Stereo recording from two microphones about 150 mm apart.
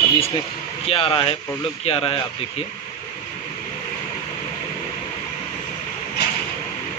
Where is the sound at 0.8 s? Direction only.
40° left (ahead or behind).